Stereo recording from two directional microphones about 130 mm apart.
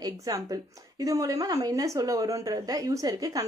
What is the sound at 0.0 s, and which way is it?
A woman's voice, 30° right (ahead or behind).